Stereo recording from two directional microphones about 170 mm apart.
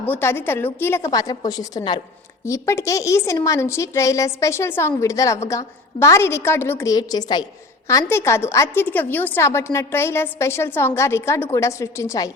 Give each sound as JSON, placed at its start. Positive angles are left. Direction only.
{"t": 0.0, "sound": "a woman's voice", "side_deg": 10}